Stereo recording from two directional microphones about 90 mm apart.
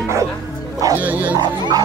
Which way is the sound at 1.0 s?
20° right (ahead or behind).